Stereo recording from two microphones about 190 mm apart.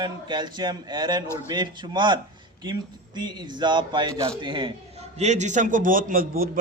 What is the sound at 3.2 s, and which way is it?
A man's voice, 25° right (ahead or behind).